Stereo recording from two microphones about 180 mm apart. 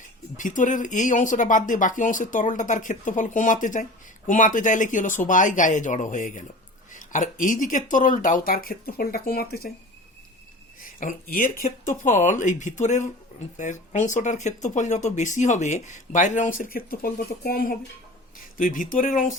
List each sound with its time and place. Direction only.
0.3 s speech: 45° left (ahead or behind)
10.8 s speech: 50° left (ahead or behind)